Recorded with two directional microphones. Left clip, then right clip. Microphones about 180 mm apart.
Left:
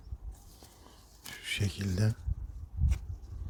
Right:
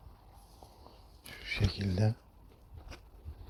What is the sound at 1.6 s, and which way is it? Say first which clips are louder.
Speech: right 1 dB; 15° left (ahead or behind).